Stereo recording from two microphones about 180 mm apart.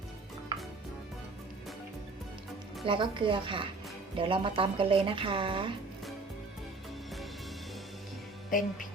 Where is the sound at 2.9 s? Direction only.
30° right (ahead or behind).